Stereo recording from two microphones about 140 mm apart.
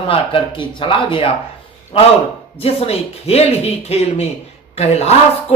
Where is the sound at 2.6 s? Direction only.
45° left (ahead or behind).